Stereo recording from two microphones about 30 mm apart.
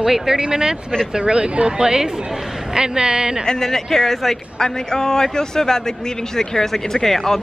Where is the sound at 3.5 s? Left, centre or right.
Centre.